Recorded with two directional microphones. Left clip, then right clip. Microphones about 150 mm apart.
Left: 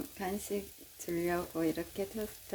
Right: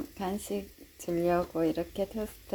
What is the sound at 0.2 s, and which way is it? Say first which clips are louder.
A woman's voice: right 3 dB; 5° right (ahead or behind).